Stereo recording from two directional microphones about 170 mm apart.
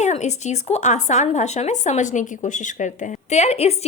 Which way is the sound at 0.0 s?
45° left (ahead or behind).